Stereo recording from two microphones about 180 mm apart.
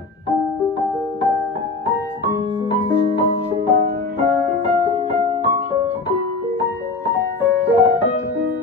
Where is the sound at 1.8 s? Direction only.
10° right (ahead or behind).